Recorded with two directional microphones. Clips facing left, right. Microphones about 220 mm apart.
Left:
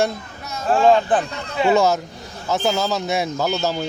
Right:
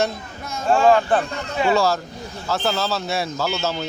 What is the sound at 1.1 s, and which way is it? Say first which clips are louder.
A man's voice: even; 15° left (ahead or behind).